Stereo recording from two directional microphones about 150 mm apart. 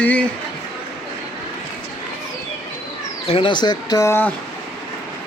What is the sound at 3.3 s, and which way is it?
Speech, 35° left (ahead or behind).